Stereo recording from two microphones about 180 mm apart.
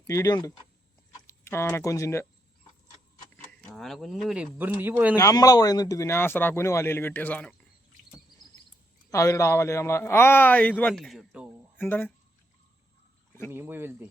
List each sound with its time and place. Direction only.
0.1 s speech: 20° left (ahead or behind)
3.7 s speech: centre (ahead or behind)
5.1 s speech: 20° left (ahead or behind)
9.0 s speech: 15° left (ahead or behind); by 11.4 s centre (ahead or behind)
11.8 s speech: 10° left (ahead or behind)
13.5 s speech: 10° right (ahead or behind)